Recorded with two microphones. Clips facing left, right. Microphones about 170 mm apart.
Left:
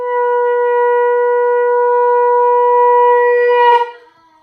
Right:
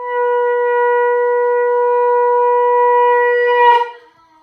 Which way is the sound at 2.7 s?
25° left (ahead or behind).